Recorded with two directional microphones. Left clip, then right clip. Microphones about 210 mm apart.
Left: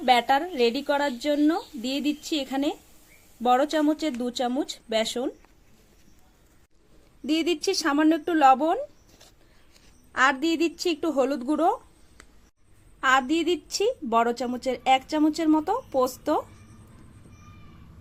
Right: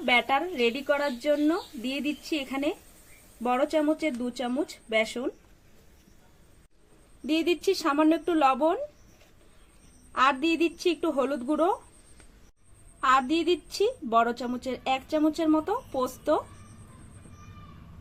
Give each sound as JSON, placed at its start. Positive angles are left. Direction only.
{"t": 0.0, "sound": "a woman's voice", "side_deg": 30}
{"t": 7.3, "sound": "a woman's voice", "side_deg": 30}
{"t": 10.1, "sound": "a woman's voice", "side_deg": 25}
{"t": 13.0, "sound": "a woman's voice", "side_deg": 25}